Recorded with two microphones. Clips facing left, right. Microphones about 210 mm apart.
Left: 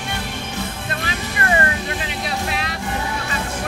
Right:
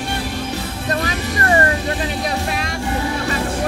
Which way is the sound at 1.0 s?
35° right (ahead or behind).